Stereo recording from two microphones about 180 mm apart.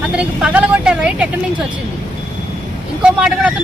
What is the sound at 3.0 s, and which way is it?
Speech, 5° right (ahead or behind).